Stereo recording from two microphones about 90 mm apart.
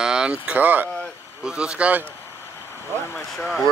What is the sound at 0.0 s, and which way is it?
Speech, 10° right (ahead or behind).